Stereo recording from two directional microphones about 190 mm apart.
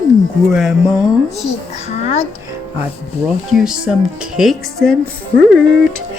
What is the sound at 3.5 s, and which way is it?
Speech, 5° right (ahead or behind).